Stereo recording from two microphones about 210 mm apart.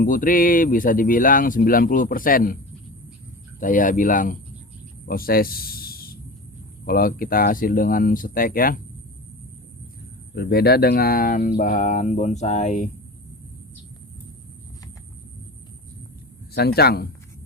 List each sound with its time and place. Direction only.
0.0 s speech: 40° left (ahead or behind)
3.6 s speech: 40° left (ahead or behind)
5.0 s a sound: 45° left (ahead or behind)
6.8 s speech: 45° left (ahead or behind)
10.3 s speech: 50° left (ahead or behind)
16.6 s speech: 50° left (ahead or behind)